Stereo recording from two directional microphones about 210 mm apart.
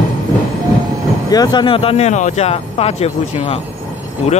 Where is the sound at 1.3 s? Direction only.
20° left (ahead or behind).